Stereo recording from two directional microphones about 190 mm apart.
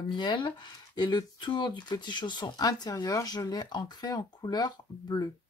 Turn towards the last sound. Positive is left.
turn(degrees=20)  # may be behind; listen again after turning